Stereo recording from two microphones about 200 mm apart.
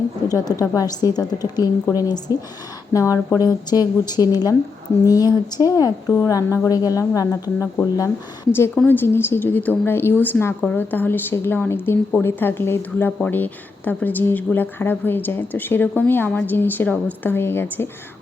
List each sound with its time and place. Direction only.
0.3 s a woman's voice: 20° left (ahead or behind)